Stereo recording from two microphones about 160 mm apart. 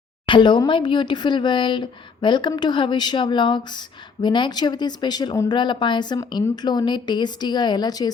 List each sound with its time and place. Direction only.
0.3 s speech: 30° left (ahead or behind)